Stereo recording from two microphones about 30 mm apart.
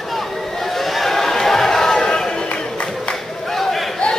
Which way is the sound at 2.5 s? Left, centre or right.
Left.